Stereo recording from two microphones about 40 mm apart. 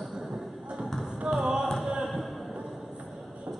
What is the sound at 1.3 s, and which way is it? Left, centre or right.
Music, centre.